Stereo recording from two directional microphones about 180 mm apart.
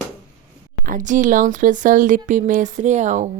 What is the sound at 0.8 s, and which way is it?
Speech, 45° right (ahead or behind).